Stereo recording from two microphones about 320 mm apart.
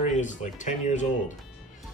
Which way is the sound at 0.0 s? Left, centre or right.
Left.